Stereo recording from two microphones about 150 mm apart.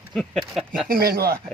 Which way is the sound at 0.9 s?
90° right.